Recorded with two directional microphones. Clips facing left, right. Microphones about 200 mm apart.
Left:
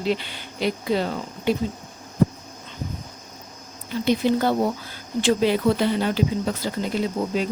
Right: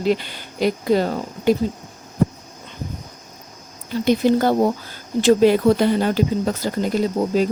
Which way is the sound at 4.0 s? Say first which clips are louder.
Right 4 dB; 45° right (ahead or behind).